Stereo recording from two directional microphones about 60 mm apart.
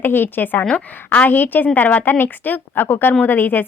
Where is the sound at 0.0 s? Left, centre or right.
Left.